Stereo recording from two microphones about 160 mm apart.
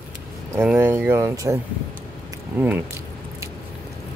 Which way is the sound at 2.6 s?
10° right (ahead or behind).